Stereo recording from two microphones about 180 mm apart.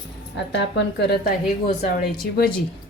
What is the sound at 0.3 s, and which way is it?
Speech, 80° left.